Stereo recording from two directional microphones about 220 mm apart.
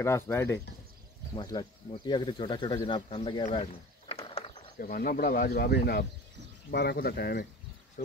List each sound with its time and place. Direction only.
0.0 s speech: 10° left (ahead or behind)
4.1 s a sound: 25° left (ahead or behind)
4.7 s speech: 40° left (ahead or behind)